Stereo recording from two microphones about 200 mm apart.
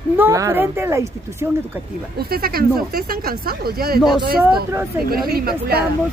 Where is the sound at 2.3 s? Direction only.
50° right (ahead or behind).